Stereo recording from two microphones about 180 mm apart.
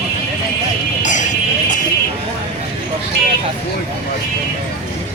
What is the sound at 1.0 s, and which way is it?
Music, 40° left (ahead or behind).